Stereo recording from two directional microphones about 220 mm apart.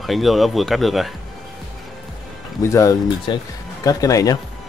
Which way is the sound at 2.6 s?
15° left (ahead or behind).